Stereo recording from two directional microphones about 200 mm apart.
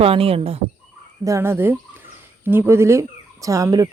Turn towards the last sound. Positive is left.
turn(degrees=-15)  # may be behind; listen again after turning